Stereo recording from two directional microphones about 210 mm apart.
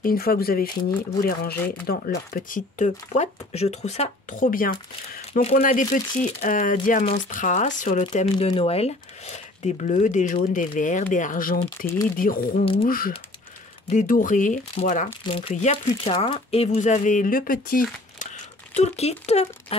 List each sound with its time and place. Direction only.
0.0 s speech: 45° left (ahead or behind)
15.2 s speech: 25° left (ahead or behind); by 17.8 s 45° left (ahead or behind)
18.2 s crumpling: 35° left (ahead or behind)